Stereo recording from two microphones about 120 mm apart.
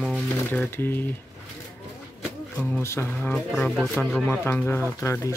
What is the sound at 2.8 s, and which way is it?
Speech, 20° left (ahead or behind).